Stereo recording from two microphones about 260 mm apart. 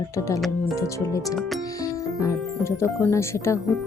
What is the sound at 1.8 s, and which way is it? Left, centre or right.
Speech, centre.